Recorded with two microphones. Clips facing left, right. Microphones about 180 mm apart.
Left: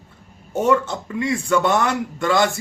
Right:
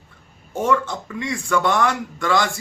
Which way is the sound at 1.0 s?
20° left (ahead or behind).